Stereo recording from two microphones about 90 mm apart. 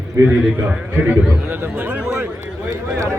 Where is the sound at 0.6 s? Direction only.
10° right (ahead or behind).